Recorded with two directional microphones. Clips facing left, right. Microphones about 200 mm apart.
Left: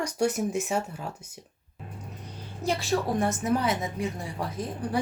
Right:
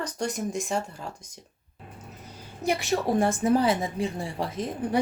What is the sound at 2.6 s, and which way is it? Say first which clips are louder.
Speech: right 2 dB; 15° right (ahead or behind).